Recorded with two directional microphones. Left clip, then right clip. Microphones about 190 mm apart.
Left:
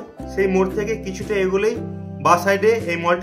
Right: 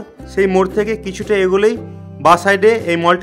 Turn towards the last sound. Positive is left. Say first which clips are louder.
# right 5 dB
turn(degrees=-50)  # may be behind; listen again after turning